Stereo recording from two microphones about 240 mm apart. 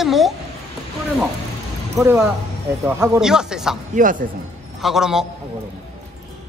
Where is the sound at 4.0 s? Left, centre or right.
Right.